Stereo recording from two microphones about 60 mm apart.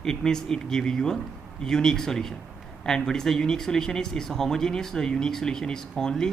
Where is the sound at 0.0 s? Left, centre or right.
Centre.